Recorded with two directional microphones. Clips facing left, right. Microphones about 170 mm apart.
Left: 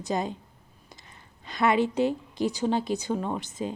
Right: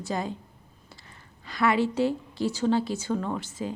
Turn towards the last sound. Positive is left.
turn(degrees=20)  # may be behind; listen again after turning